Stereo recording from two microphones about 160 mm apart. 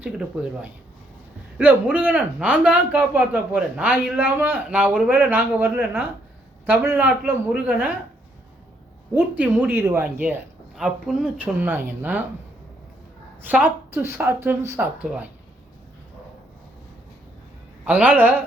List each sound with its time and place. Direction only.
0.0 s speech: 10° right (ahead or behind)
6.7 s speech: 10° right (ahead or behind)
9.1 s speech: 10° right (ahead or behind)
13.4 s speech: 10° right (ahead or behind)
17.8 s speech: 10° right (ahead or behind)